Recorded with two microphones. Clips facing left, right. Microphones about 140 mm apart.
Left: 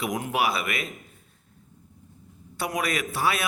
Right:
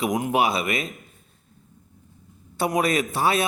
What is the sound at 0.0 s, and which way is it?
Speech, 20° right (ahead or behind).